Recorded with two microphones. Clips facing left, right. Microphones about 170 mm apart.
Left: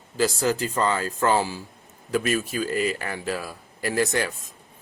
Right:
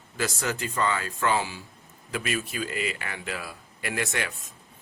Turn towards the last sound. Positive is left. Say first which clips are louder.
# left 7 dB
turn(degrees=35)  # may be behind; listen again after turning